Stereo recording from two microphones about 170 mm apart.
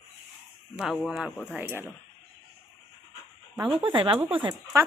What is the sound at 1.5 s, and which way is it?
Speech, 10° right (ahead or behind).